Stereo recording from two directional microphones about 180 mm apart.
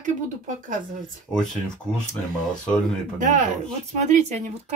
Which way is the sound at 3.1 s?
45° right (ahead or behind).